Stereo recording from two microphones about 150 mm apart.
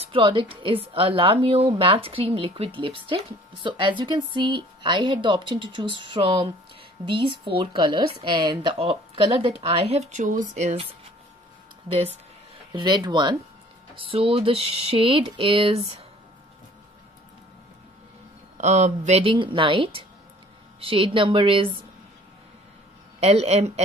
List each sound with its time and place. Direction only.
0.0 s speech: 35° right (ahead or behind); by 10.8 s 55° right (ahead or behind)
11.9 s speech: 40° right (ahead or behind)
12.7 s speech: 30° right (ahead or behind)
18.6 s speech: 50° right (ahead or behind); by 21.6 s 35° right (ahead or behind)
23.2 s speech: 45° right (ahead or behind)